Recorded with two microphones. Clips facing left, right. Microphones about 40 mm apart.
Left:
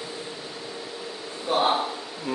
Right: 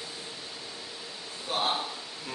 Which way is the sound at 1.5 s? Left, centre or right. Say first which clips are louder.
Left 7 dB; left.